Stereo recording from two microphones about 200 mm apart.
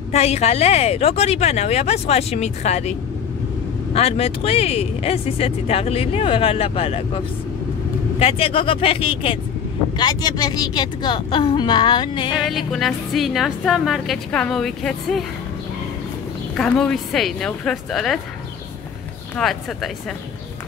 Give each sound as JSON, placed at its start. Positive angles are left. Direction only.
{"t": 0.1, "sound": "speech", "side_deg": 30}
{"t": 8.2, "sound": "speech", "side_deg": 30}
{"t": 12.4, "sound": "a woman's voice", "side_deg": 0}
{"t": 16.5, "sound": "a woman's voice", "side_deg": 5}
{"t": 19.3, "sound": "a woman's voice", "side_deg": 0}